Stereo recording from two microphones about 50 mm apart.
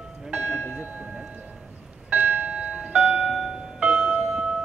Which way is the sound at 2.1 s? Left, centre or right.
Right.